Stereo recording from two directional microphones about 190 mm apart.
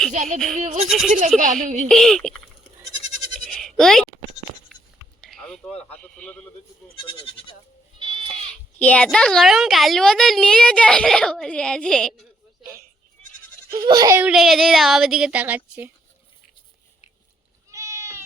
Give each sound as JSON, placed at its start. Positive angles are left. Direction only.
{"t": 0.1, "sound": "speech", "side_deg": -40}
{"t": 0.3, "sound": "a woman's voice", "side_deg": 0}
{"t": 0.6, "sound": "speech", "side_deg": -40}
{"t": 0.9, "sound": "a woman's voice", "side_deg": 0}
{"t": 3.4, "sound": "bleat", "side_deg": 0}
{"t": 4.7, "sound": "writing", "side_deg": 0}
{"t": 5.2, "sound": "a man's voice", "side_deg": 5}
{"t": 6.9, "sound": "speech", "side_deg": 25}
{"t": 7.9, "sound": "goat", "side_deg": -25}
{"t": 8.8, "sound": "a woman's voice", "side_deg": 5}
{"t": 13.7, "sound": "a child's voice", "side_deg": -20}
{"t": 14.3, "sound": "a woman's voice", "side_deg": 0}
{"t": 17.7, "sound": "goat", "side_deg": -15}